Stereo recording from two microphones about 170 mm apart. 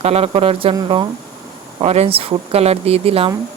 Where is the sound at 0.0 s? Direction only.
35° right (ahead or behind).